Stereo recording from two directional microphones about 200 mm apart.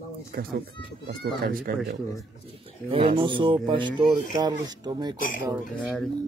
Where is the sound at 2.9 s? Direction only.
25° right (ahead or behind).